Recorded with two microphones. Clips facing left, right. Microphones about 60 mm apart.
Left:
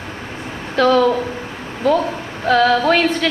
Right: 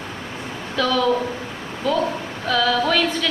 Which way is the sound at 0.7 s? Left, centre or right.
Left.